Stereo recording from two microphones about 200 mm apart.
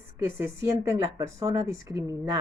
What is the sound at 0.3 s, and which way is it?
A woman's voice, 15° right (ahead or behind).